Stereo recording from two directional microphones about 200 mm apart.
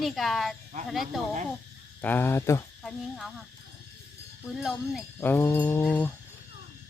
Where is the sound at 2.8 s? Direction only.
Centre (ahead or behind).